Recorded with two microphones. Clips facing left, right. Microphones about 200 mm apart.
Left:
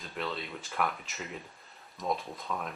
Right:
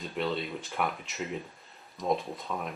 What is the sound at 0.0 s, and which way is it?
Speech, centre (ahead or behind).